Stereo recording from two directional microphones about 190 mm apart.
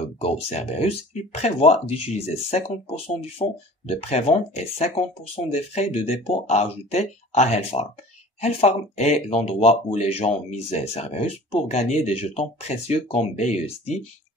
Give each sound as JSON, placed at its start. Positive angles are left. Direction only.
{"t": 0.2, "sound": "speech", "side_deg": 35}